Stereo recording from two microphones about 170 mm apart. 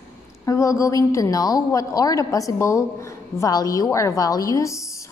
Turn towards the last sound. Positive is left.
turn(degrees=20)  # may be behind; listen again after turning